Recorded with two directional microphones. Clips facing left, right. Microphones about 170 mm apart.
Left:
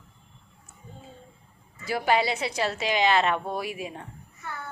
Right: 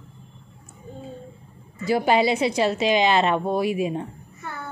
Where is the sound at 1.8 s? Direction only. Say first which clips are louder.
Right 5 dB; 25° right (ahead or behind).